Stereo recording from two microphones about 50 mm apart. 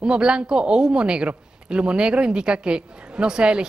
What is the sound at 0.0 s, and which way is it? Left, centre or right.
A woman's voice, centre.